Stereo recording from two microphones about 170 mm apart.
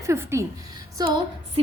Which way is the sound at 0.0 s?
15° right (ahead or behind).